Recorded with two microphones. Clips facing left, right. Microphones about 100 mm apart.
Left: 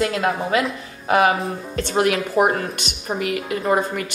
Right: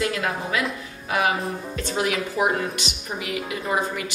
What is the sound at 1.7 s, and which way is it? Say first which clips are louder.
Speech: left 7 dB; 60° left (ahead or behind).